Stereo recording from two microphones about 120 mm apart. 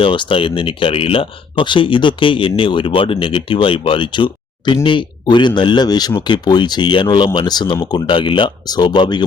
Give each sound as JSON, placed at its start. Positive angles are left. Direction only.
{"t": 0.0, "sound": "speech", "side_deg": 45}